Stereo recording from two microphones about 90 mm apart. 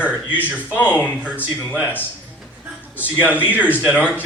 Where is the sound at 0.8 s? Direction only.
20° left (ahead or behind).